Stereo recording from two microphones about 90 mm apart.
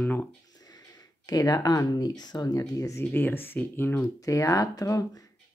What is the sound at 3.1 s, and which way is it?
Speech, 25° left (ahead or behind).